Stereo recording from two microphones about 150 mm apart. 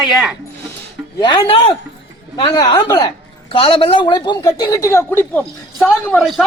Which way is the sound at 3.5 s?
35° left (ahead or behind).